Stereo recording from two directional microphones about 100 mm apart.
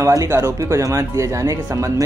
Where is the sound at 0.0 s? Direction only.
30° right (ahead or behind).